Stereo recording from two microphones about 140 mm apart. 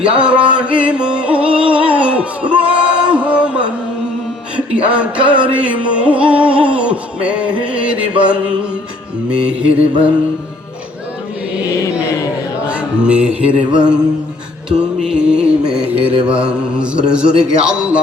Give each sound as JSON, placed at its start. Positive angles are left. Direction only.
{"t": 0.0, "sound": "music", "side_deg": -10}
{"t": 12.6, "sound": "music", "side_deg": -10}
{"t": 14.7, "sound": "mantra", "side_deg": -5}